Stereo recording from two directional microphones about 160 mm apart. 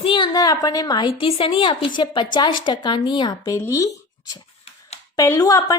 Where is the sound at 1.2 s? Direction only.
35° left (ahead or behind).